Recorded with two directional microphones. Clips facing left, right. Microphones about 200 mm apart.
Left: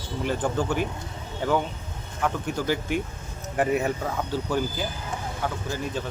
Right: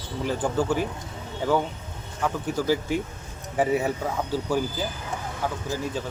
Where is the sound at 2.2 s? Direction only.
5° right (ahead or behind).